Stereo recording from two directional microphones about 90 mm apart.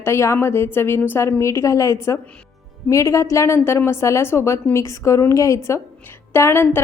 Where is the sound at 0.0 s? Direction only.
30° left (ahead or behind).